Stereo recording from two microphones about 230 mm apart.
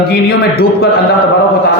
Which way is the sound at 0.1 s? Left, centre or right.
Left.